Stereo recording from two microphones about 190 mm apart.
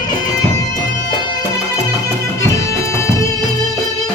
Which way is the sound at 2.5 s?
15° left (ahead or behind).